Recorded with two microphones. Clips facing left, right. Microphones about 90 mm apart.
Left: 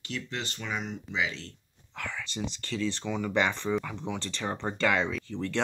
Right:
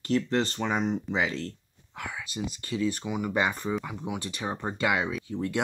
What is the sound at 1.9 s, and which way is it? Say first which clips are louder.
Speech: right 1 dB; 10° right (ahead or behind).